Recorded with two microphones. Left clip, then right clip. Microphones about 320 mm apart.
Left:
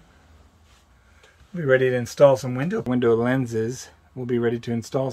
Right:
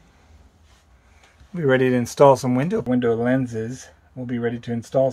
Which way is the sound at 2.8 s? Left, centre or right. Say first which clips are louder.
Left 2 dB; centre.